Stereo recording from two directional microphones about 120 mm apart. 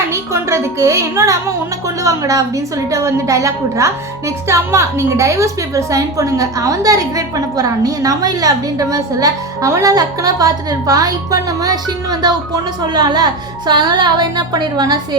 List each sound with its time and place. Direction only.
0.1 s a woman's voice: 25° right (ahead or behind)